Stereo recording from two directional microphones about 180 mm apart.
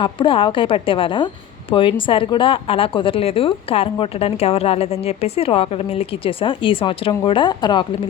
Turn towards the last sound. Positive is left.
turn(degrees=25)  # may be behind; listen again after turning